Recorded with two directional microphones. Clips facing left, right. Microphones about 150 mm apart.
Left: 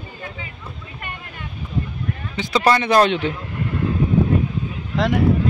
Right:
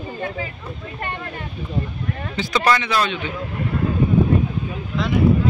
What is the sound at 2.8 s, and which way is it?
Speech, 50° left (ahead or behind).